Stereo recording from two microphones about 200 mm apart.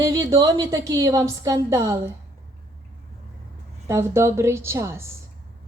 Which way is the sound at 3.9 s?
15° right (ahead or behind).